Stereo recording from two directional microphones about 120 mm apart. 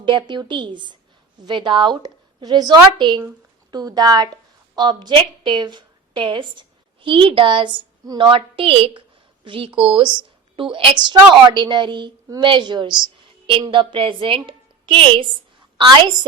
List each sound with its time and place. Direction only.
0.0 s a woman's voice: 40° right (ahead or behind)
8.0 s a woman's voice: 35° right (ahead or behind)
8.3 s a woman's voice: 50° right (ahead or behind)